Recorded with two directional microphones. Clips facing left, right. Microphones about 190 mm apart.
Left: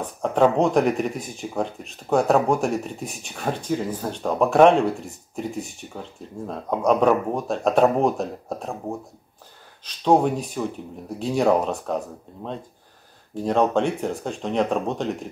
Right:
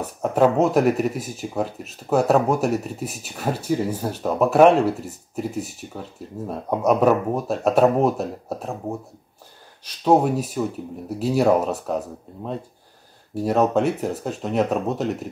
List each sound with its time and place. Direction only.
0.0 s speech: 5° right (ahead or behind)
9.8 s speech: 5° right (ahead or behind)
13.3 s speech: 10° right (ahead or behind)